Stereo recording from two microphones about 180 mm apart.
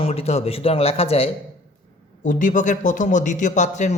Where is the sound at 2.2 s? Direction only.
45° left (ahead or behind).